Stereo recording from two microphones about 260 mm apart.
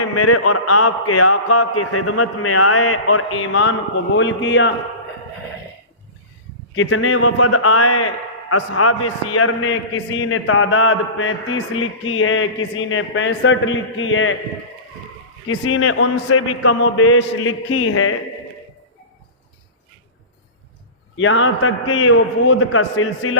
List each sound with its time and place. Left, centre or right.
0.0 s a man's voice: left
6.7 s a man's voice: left
15.4 s speech: left
21.2 s speech: left